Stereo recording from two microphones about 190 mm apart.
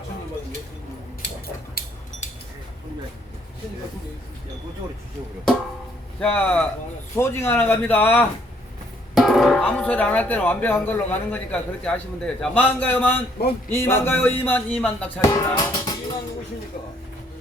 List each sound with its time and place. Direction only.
1.8 s a sound: 50° left (ahead or behind)
6.1 s speech: 5° left (ahead or behind)
15.3 s music: 20° left (ahead or behind)